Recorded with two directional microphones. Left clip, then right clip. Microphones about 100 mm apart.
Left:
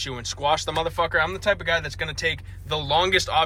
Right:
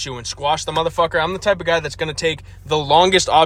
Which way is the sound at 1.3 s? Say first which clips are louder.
Right 5 dB; 65° right (ahead or behind).